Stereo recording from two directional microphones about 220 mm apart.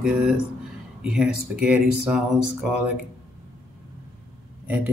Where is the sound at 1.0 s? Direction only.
Centre (ahead or behind).